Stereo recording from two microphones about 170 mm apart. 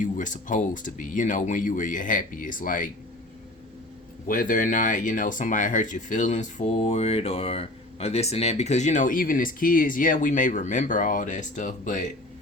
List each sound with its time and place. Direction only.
0.0 s speech: 50° left (ahead or behind)
4.3 s speech: 50° left (ahead or behind)